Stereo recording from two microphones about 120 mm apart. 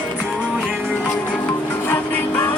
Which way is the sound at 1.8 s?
15° left (ahead or behind).